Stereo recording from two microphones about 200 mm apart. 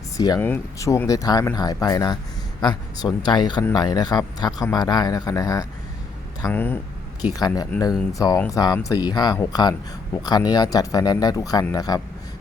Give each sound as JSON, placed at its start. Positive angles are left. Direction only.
{"t": 0.2, "sound": "speech", "side_deg": 20}